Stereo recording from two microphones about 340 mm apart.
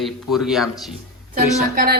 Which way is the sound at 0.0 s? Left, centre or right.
Centre.